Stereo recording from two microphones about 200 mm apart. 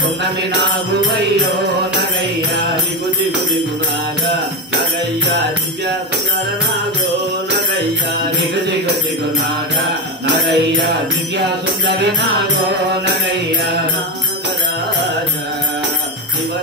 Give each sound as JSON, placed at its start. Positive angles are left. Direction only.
{"t": 10.4, "sound": "music", "side_deg": -60}